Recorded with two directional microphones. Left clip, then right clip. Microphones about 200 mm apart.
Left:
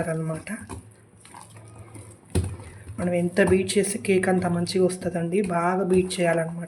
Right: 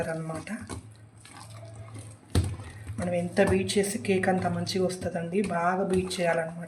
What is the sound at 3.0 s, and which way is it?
A woman's voice, 25° left (ahead or behind).